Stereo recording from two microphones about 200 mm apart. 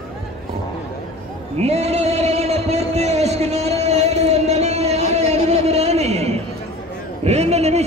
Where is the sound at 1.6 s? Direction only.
30° right (ahead or behind).